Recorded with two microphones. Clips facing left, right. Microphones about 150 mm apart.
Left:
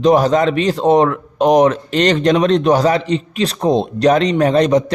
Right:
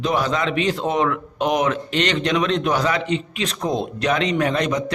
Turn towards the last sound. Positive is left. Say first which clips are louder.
# left 8 dB
turn(degrees=35)  # may be behind; listen again after turning